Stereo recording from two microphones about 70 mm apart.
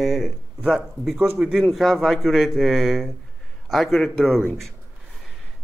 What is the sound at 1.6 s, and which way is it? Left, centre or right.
A man's voice, centre.